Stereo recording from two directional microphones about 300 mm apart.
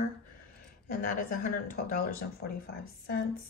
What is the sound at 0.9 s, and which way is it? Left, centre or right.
Speech, left.